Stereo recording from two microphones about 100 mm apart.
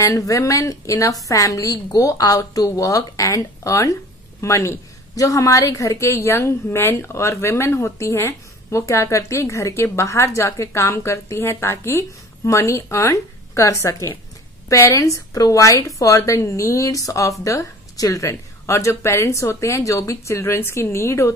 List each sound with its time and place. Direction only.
0.0 s a woman's voice: 35° left (ahead or behind)